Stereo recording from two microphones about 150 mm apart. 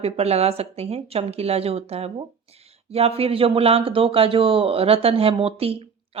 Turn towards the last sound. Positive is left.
turn(degrees=-40)  # may be behind; listen again after turning